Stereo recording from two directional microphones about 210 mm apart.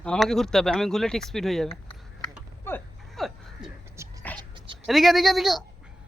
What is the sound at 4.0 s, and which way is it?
Music, 15° right (ahead or behind).